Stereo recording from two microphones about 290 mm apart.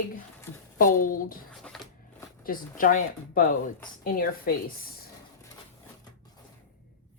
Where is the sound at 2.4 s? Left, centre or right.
Left.